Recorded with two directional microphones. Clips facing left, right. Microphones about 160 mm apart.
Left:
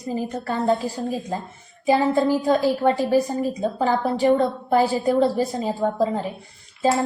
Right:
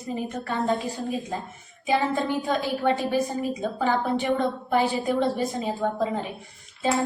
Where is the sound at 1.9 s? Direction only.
35° left (ahead or behind).